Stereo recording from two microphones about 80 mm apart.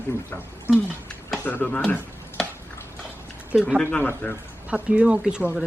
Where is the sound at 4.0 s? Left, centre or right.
Left.